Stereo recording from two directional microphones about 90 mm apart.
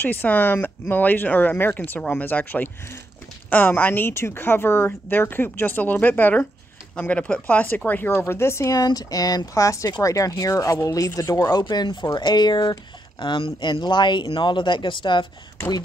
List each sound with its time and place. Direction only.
0.0 s a woman's voice: 20° left (ahead or behind); by 11.6 s 40° left (ahead or behind)
11.6 s speech: 55° left (ahead or behind)